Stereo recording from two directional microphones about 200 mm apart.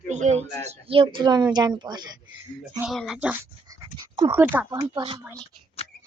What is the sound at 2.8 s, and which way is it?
Speech, centre (ahead or behind).